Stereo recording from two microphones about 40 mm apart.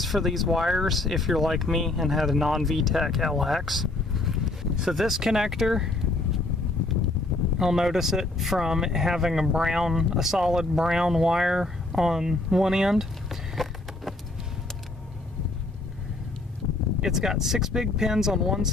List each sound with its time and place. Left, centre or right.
0.0 s speech: centre
7.5 s speech: centre
17.0 s speech: centre